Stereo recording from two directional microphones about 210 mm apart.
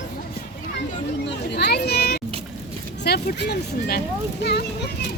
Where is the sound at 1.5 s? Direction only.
50° left (ahead or behind).